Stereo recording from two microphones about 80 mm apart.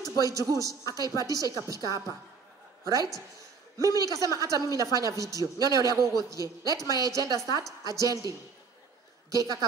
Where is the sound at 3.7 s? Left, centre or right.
Right.